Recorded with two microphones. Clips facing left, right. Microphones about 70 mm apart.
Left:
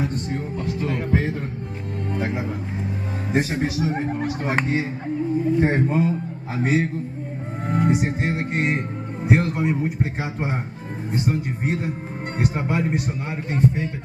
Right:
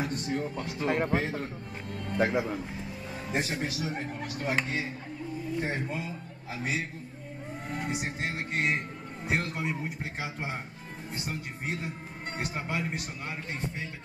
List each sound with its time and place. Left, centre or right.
0.8 s a man's voice: right
3.3 s speech: left
11.1 s speech: left